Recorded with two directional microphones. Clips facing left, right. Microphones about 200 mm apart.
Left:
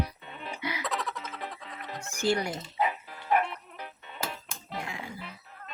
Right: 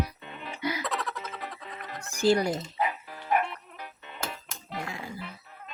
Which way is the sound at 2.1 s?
35° right (ahead or behind).